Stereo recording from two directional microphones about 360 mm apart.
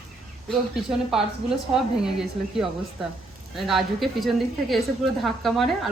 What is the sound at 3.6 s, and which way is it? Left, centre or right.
A woman's voice, centre.